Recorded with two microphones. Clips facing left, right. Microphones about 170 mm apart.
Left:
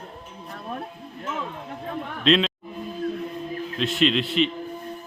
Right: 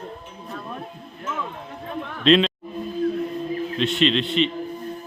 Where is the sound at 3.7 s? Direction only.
Centre (ahead or behind).